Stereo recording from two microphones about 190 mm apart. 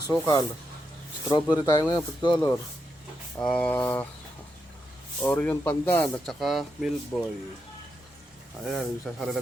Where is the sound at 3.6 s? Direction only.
10° left (ahead or behind).